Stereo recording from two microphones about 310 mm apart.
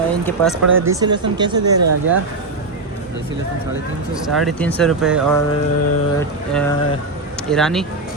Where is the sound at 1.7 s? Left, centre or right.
Right.